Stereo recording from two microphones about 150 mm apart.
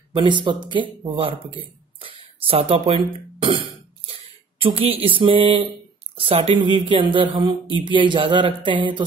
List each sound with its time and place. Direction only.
0.1 s speech: 35° right (ahead or behind)
2.0 s cough: 40° right (ahead or behind)
6.1 s speech: 40° right (ahead or behind)